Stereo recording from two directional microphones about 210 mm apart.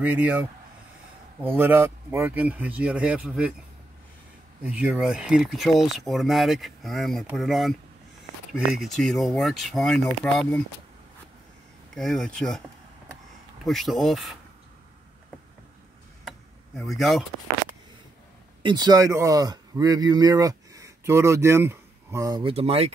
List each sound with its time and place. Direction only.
0.0 s speech: 10° right (ahead or behind)
4.6 s speech: 5° right (ahead or behind)
11.9 s speech: centre (ahead or behind)
13.7 s speech: centre (ahead or behind)
16.3 s vehicle: centre (ahead or behind)
18.6 s speech: 20° right (ahead or behind)